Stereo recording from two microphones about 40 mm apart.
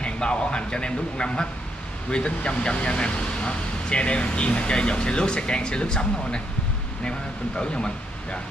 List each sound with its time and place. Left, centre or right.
0.0 s speech: left